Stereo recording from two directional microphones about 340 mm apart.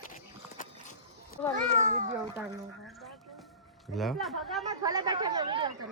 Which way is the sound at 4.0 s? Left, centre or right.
Centre.